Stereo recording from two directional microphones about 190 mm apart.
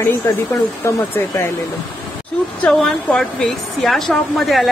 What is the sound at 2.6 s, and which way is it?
A woman's voice, 5° left (ahead or behind).